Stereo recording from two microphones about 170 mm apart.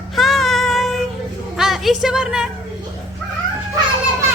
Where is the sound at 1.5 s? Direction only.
Centre (ahead or behind).